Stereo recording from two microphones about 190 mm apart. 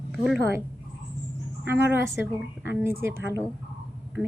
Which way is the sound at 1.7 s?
10° right (ahead or behind).